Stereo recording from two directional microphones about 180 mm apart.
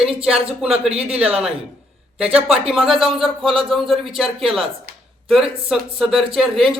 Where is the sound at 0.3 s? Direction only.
5° right (ahead or behind).